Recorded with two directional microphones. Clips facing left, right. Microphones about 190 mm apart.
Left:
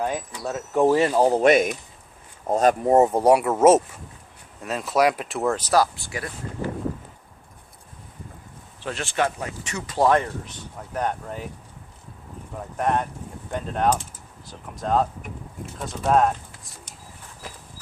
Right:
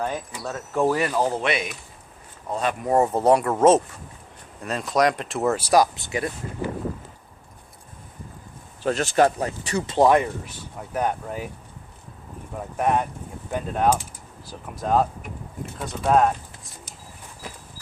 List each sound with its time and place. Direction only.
0.4 s speech: 15° left (ahead or behind); by 2.7 s 45° left (ahead or behind)
2.8 s speech: 20° left (ahead or behind); by 6.7 s 20° right (ahead or behind)
8.8 s speech: 40° right (ahead or behind); by 10.1 s 25° right (ahead or behind)
10.1 s speech: 10° right (ahead or behind)
12.5 s speech: 5° right (ahead or behind)